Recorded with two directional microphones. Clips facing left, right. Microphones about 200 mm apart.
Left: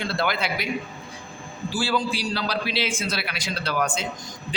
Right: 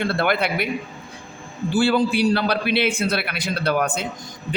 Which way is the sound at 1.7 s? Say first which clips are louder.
Right 7 dB; 60° right (ahead or behind).